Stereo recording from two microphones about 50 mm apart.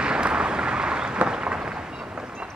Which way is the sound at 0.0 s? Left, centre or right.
Centre.